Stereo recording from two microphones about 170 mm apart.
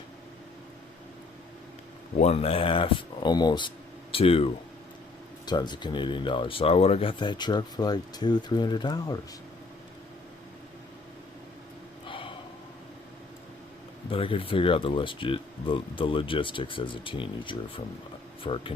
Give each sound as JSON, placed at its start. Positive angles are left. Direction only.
{"t": 2.1, "sound": "speech", "side_deg": 40}
{"t": 5.5, "sound": "speech", "side_deg": 25}
{"t": 12.0, "sound": "gasp", "side_deg": 30}
{"t": 14.1, "sound": "speech", "side_deg": 30}